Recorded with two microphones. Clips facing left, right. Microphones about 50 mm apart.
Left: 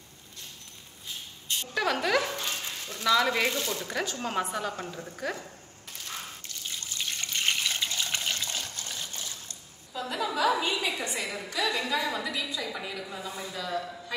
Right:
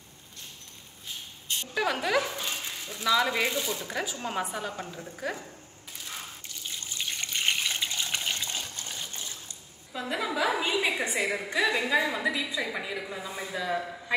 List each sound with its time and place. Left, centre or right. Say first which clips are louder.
1.7 s speech: left 1 dB; centre
7.0 s water: even; centre
11.3 s a woman's voice: right 1 dB; right